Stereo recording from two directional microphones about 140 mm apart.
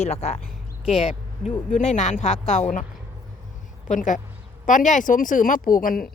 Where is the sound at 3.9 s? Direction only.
65° left (ahead or behind).